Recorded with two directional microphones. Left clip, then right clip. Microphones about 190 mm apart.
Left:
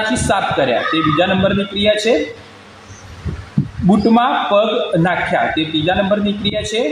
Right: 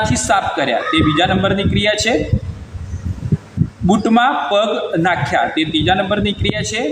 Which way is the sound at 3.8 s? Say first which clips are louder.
Even; 20° left (ahead or behind).